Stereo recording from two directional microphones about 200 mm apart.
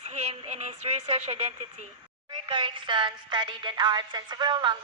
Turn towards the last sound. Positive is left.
turn(degrees=-20)  # may be behind; listen again after turning